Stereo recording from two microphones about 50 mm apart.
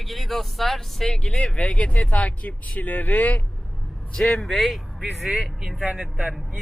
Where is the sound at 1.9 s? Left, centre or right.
Left.